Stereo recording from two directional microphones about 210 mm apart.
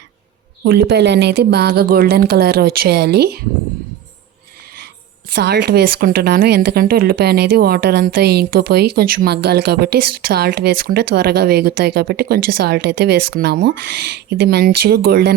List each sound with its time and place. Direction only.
0.6 s speech: 55° right (ahead or behind)
5.3 s speech: 50° right (ahead or behind)